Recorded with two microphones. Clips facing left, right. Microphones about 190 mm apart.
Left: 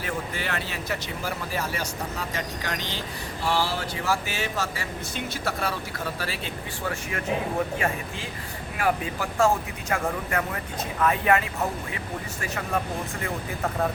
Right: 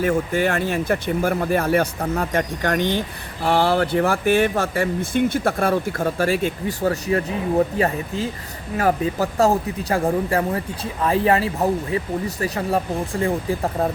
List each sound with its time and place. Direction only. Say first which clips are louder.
0.0 s speech: right 12 dB; 45° right (ahead or behind)